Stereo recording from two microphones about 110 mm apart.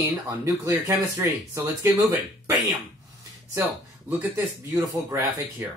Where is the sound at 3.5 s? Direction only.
15° right (ahead or behind).